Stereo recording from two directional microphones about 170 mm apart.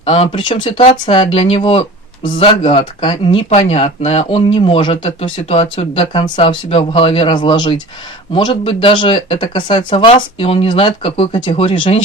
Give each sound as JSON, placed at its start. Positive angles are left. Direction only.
{"t": 0.0, "sound": "speech", "side_deg": 35}